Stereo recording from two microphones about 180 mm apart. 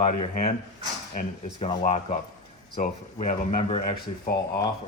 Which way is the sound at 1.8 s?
40° left (ahead or behind).